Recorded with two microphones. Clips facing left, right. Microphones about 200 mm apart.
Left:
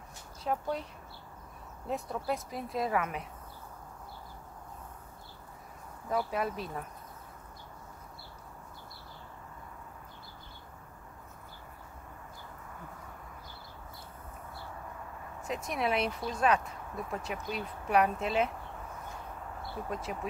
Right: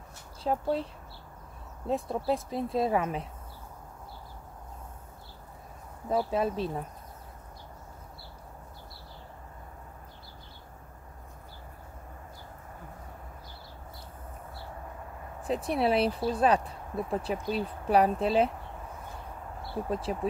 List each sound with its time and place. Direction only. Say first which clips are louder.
0.4 s speech: right 5 dB; 30° right (ahead or behind)
1.9 s speech: right 5 dB; 30° right (ahead or behind)
6.0 s speech: right 4 dB; 25° right (ahead or behind)
15.4 s speech: right 6 dB; 30° right (ahead or behind)
19.9 s speech: right 6 dB; 30° right (ahead or behind)